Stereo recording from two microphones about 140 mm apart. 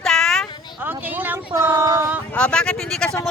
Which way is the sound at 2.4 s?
10° left (ahead or behind).